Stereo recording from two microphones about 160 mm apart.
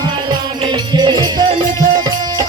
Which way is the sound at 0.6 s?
30° right (ahead or behind).